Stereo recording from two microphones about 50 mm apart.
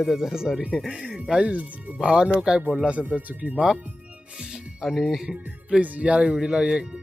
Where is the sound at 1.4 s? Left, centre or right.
Right.